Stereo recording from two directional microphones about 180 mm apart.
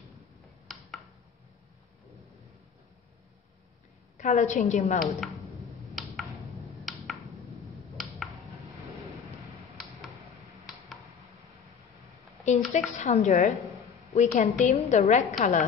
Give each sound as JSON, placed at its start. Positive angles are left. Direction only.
{"t": 4.2, "sound": "a woman's voice", "side_deg": 40}
{"t": 5.2, "sound": "tick-tock", "side_deg": 0}
{"t": 7.7, "sound": "a sound", "side_deg": 0}
{"t": 12.4, "sound": "a woman's voice", "side_deg": 40}